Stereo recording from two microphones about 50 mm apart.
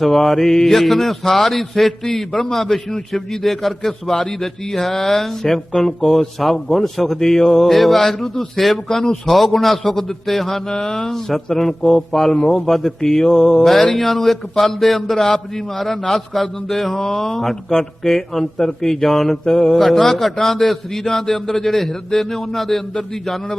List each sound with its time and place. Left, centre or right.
0.0 s a man's voice: centre
12.3 s a man's voice: left
12.6 s a man's voice: centre